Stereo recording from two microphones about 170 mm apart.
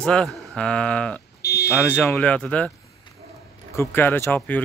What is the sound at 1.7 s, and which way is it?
Speech, 5° left (ahead or behind).